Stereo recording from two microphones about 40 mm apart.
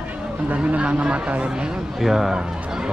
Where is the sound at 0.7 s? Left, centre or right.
Right.